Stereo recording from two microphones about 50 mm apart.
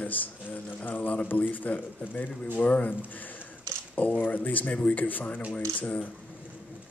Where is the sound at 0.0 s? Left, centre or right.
Left.